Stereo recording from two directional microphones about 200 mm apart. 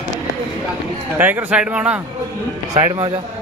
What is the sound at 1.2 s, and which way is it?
Speech, 10° right (ahead or behind).